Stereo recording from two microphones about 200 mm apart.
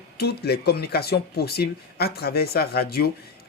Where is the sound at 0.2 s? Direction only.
55° left (ahead or behind).